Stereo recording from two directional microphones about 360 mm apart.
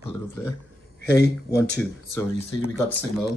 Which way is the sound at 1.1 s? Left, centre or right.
Left.